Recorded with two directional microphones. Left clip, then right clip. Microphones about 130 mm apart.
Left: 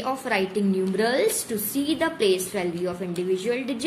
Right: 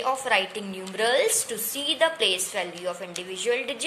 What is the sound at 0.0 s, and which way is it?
A woman's voice, 15° right (ahead or behind).